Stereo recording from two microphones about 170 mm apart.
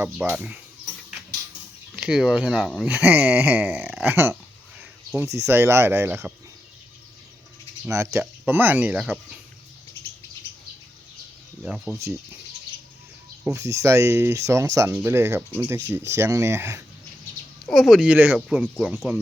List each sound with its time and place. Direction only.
0.0 s speech: 10° right (ahead or behind)
2.0 s speech: 5° right (ahead or behind)
2.8 s speech: 10° right (ahead or behind)
4.0 s speech: 15° right (ahead or behind)
7.9 s speech: 15° right (ahead or behind)
11.6 s speech: 5° right (ahead or behind)
13.5 s speech: 20° right (ahead or behind)
17.7 s speech: centre (ahead or behind)